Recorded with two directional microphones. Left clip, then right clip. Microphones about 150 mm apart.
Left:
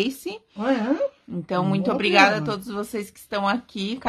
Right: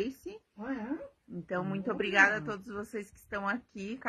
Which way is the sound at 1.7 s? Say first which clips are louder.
Left 10 dB; 10° right (ahead or behind).